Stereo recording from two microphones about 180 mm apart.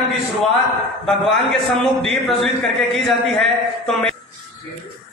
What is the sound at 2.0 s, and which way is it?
A man's voice, centre (ahead or behind).